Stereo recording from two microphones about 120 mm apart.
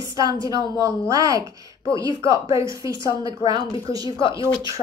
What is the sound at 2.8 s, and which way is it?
Speech, 30° right (ahead or behind).